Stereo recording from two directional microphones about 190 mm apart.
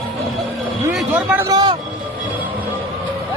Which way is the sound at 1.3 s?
20° right (ahead or behind).